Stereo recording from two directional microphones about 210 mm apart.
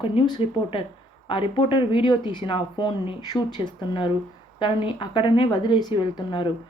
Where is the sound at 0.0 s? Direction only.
25° left (ahead or behind).